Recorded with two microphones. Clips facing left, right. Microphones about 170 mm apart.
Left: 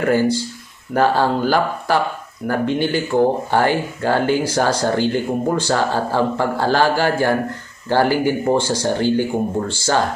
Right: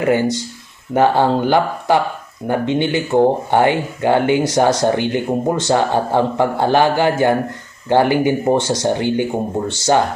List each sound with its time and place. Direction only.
0.0 s speech: 20° right (ahead or behind)